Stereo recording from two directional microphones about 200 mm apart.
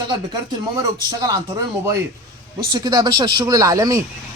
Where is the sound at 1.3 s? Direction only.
20° right (ahead or behind).